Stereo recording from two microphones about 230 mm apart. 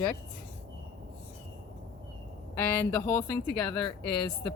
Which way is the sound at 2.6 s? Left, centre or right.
Centre.